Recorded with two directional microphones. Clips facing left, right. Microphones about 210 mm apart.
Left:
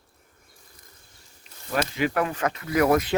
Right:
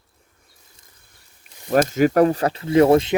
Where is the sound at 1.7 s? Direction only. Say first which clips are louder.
Right 9 dB; 45° right (ahead or behind); by 3.1 s 25° right (ahead or behind).